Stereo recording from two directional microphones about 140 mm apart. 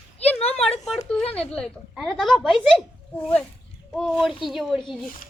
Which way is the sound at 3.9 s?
Centre (ahead or behind).